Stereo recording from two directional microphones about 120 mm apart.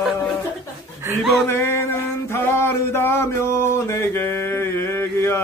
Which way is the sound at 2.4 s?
20° left (ahead or behind).